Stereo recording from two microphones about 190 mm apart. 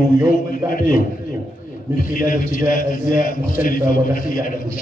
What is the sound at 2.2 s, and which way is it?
A man's voice, 45° left (ahead or behind).